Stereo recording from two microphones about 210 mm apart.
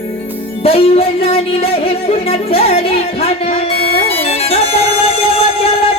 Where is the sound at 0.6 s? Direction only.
25° left (ahead or behind).